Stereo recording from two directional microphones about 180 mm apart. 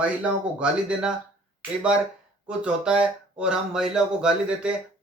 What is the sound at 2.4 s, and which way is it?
Speech, 5° right (ahead or behind).